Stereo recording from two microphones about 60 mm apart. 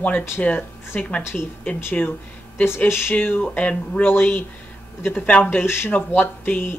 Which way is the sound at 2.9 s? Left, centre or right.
Left.